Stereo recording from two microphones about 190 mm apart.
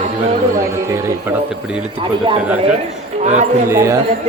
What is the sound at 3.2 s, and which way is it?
Speech, 35° right (ahead or behind).